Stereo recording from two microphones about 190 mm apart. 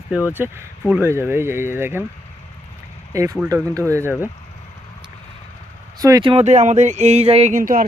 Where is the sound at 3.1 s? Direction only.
15° right (ahead or behind).